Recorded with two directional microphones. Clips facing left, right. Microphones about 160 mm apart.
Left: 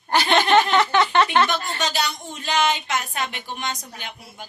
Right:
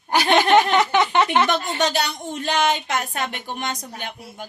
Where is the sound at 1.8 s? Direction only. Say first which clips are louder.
Right 3 dB; 60° right (ahead or behind).